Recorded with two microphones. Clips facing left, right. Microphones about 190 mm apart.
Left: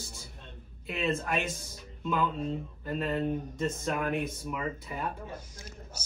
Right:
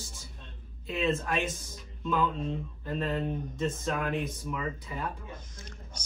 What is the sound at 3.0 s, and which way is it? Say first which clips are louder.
Speech: left 4 dB; centre (ahead or behind).